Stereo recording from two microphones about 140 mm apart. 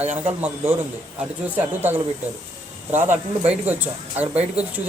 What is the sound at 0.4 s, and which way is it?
Speech, 15° right (ahead or behind).